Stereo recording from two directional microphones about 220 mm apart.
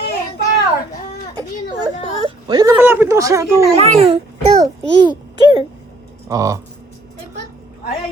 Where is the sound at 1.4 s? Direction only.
20° right (ahead or behind).